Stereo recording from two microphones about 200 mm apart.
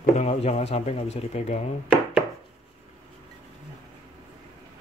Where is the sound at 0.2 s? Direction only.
35° left (ahead or behind).